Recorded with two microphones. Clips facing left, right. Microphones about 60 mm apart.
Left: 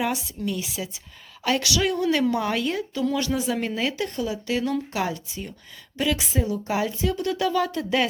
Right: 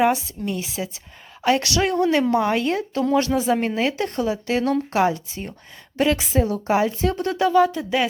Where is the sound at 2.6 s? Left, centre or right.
Right.